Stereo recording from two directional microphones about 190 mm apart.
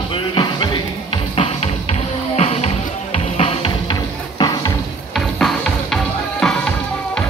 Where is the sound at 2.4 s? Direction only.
35° left (ahead or behind).